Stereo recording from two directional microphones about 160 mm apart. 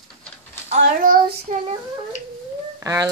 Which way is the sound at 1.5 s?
50° right (ahead or behind).